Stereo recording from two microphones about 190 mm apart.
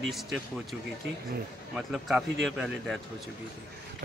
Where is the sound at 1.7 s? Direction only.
5° right (ahead or behind).